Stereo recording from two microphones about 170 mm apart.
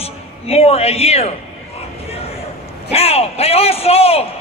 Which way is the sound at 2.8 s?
35° left (ahead or behind).